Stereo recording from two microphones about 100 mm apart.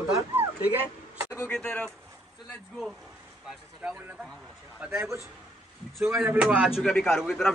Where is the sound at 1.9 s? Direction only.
25° right (ahead or behind).